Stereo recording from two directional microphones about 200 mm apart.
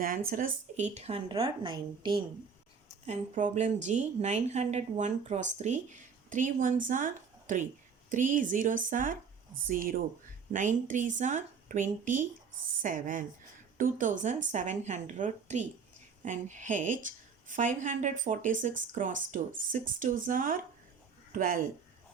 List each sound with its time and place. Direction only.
0.3 s a woman's voice: 40° right (ahead or behind); by 2.2 s 25° right (ahead or behind)
3.1 s a woman's voice: 35° right (ahead or behind)